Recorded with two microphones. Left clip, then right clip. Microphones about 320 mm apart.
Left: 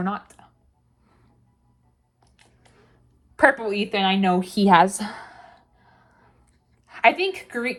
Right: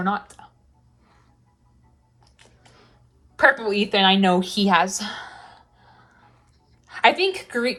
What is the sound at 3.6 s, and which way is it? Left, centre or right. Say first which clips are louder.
Speech: right 4 dB; centre.